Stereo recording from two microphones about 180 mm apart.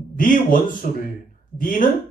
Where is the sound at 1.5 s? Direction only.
50° left (ahead or behind).